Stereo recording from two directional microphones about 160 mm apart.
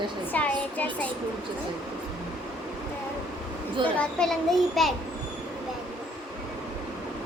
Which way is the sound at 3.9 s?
5° left (ahead or behind).